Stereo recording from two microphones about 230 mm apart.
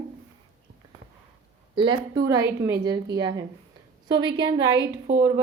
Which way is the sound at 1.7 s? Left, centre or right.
Right.